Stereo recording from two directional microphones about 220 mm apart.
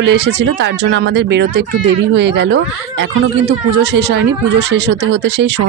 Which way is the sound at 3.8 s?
50° right (ahead or behind).